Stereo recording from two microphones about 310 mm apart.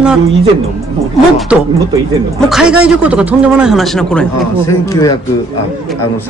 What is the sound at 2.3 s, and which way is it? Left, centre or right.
Speech, centre.